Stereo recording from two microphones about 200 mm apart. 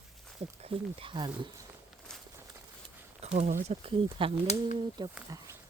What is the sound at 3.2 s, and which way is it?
Speech, 35° right (ahead or behind).